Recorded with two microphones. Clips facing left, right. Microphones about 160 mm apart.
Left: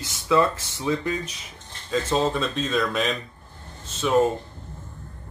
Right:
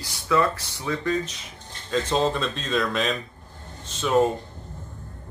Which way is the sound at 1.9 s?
5° left (ahead or behind).